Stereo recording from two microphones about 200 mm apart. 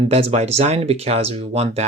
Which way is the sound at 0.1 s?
30° right (ahead or behind).